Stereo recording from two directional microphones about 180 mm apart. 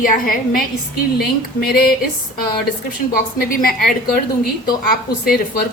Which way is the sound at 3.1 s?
50° left (ahead or behind).